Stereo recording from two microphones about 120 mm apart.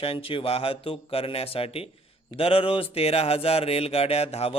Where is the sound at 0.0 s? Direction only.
50° left (ahead or behind).